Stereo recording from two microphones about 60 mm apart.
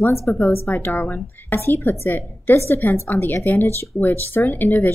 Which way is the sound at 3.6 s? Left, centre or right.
Left.